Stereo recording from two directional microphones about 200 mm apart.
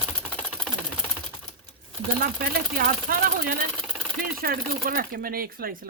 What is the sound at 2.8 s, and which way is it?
Speech, 45° right (ahead or behind).